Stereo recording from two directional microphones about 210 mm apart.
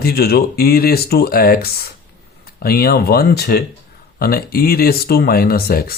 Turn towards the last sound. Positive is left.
turn(degrees=45)  # may be behind; listen again after turning